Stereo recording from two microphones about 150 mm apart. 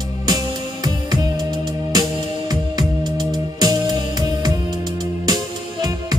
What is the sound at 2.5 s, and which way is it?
Music, 30° right (ahead or behind).